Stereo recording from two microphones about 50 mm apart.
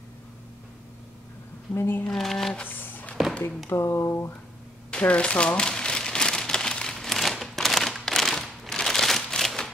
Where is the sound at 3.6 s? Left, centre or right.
Left.